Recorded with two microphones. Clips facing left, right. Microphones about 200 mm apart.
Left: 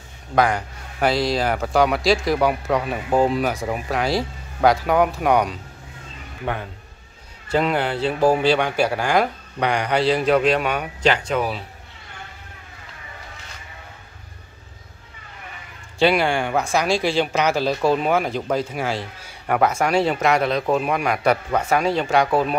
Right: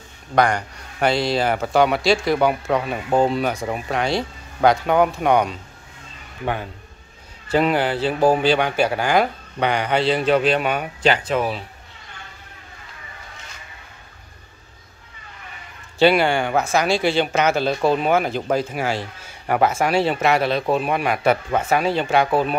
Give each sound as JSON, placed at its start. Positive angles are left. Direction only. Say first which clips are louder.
{"t": 0.4, "sound": "a man's voice", "louder": "right 1 dB", "side_deg": 0}
{"t": 7.5, "sound": "a man's voice", "louder": "right 2 dB", "side_deg": -5}
{"t": 10.4, "sound": "speech", "louder": "even", "side_deg": -35}
{"t": 11.2, "sound": "a man's voice", "louder": "right 1 dB", "side_deg": 0}
{"t": 16.0, "sound": "a man's voice", "louder": "right 2 dB", "side_deg": 0}